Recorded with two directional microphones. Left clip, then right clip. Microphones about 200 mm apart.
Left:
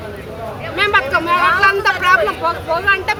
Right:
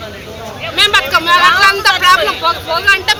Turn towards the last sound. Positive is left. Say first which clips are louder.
# right 4 dB
turn(degrees=10)  # may be behind; listen again after turning